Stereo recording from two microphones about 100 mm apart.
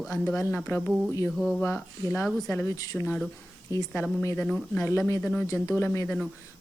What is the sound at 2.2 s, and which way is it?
Speech, 15° left (ahead or behind).